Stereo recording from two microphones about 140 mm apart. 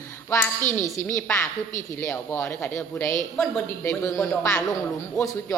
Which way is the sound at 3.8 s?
20° left (ahead or behind).